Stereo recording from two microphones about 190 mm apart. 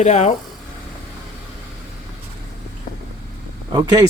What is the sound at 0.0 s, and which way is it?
Speech, 40° left (ahead or behind).